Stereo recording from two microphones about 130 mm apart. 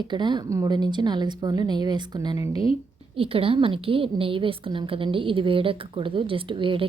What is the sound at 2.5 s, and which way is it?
Speech, 45° left (ahead or behind).